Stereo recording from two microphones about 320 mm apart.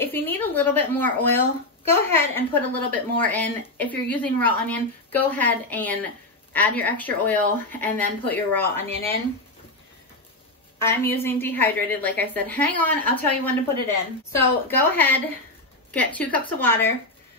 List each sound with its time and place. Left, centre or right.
0.0 s speech: centre
10.8 s speech: centre